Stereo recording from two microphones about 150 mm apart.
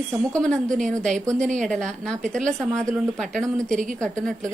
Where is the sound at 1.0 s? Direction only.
5° left (ahead or behind).